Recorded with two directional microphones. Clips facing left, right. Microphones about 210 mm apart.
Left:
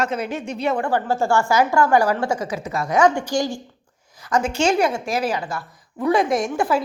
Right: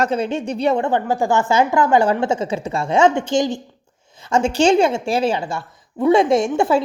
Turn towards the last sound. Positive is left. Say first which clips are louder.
# right 4 dB
turn(degrees=-25)  # may be behind; listen again after turning